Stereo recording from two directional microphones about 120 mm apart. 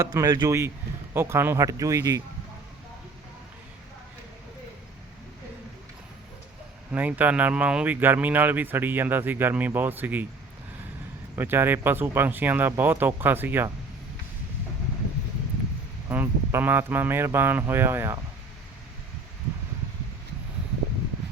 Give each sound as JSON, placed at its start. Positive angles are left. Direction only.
{"t": 0.0, "sound": "speech", "side_deg": -30}
{"t": 6.9, "sound": "speech", "side_deg": -15}
{"t": 11.3, "sound": "speech", "side_deg": -20}
{"t": 16.0, "sound": "speech", "side_deg": -20}